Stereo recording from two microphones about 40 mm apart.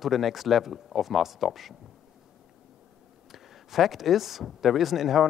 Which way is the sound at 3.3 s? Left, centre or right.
Centre.